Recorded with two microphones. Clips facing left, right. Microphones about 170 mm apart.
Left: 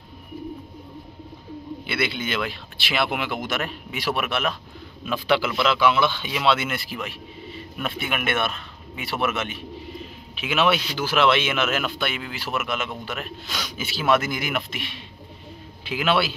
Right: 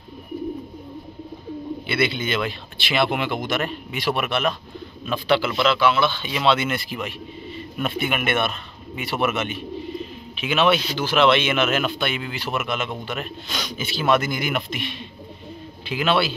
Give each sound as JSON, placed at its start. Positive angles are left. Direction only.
{"t": 1.9, "sound": "a man's voice", "side_deg": 5}